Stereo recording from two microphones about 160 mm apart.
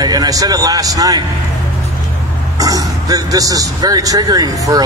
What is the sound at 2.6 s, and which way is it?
Speech, 20° right (ahead or behind).